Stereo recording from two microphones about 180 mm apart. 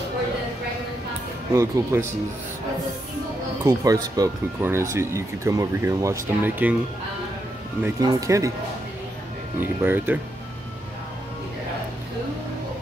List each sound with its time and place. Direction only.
1.5 s speech: 15° right (ahead or behind)
3.6 s speech: 20° right (ahead or behind)
8.0 s speech: 20° right (ahead or behind)
9.6 s speech: 10° right (ahead or behind)